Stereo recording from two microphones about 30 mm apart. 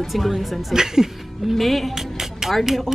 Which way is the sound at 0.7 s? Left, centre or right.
Centre.